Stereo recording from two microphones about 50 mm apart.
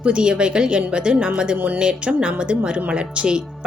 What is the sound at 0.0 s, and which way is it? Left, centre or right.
A woman's voice, centre.